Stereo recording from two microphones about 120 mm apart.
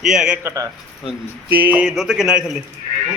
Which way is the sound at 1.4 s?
15° right (ahead or behind).